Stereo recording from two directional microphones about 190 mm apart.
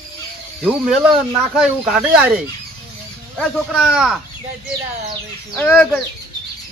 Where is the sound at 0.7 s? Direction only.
5° right (ahead or behind).